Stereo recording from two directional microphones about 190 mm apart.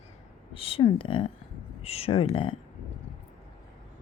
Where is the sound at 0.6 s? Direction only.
30° left (ahead or behind).